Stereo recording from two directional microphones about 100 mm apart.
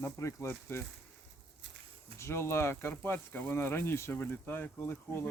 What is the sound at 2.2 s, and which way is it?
Speech, 25° left (ahead or behind).